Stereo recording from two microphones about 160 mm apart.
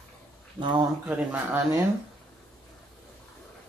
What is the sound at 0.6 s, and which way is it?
Speech, 30° right (ahead or behind).